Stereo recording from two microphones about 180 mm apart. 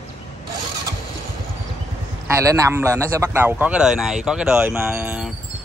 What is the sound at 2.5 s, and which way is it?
A man's voice, 15° right (ahead or behind).